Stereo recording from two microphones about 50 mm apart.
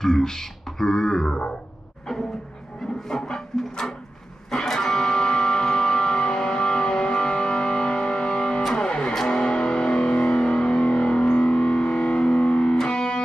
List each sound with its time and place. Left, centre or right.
0.0 s speech: centre
3.1 s wood: centre
4.5 s music: centre